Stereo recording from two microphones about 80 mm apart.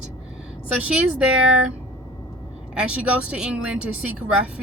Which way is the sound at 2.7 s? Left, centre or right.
Centre.